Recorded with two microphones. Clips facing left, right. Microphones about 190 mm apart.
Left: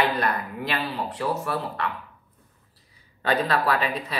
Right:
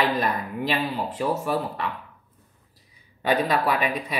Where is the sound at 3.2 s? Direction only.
15° right (ahead or behind).